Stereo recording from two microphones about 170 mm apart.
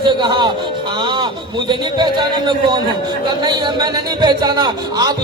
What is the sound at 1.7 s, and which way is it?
A man's voice, 30° right (ahead or behind).